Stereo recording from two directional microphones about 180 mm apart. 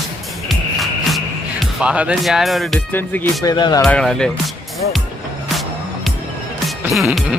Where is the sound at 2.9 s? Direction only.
10° left (ahead or behind).